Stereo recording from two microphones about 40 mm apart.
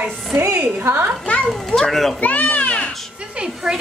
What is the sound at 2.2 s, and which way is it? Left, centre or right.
Speech, left.